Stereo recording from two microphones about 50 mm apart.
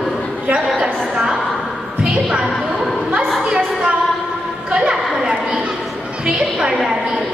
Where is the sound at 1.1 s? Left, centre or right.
Centre.